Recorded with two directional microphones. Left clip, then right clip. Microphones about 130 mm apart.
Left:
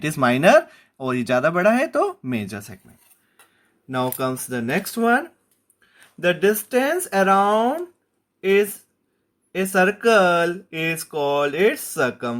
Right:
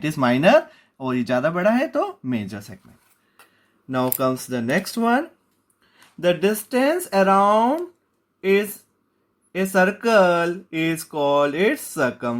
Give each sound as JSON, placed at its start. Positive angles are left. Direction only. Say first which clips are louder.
{"t": 0.0, "sound": "speech", "louder": "left 1 dB", "side_deg": 25}
{"t": 3.8, "sound": "speech", "louder": "right 2 dB", "side_deg": 40}